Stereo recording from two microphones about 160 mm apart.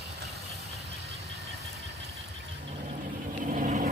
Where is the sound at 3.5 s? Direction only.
50° right (ahead or behind).